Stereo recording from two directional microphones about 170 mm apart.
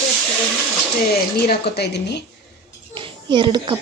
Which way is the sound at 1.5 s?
70° left (ahead or behind).